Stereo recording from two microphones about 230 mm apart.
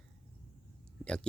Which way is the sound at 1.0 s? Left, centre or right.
Centre.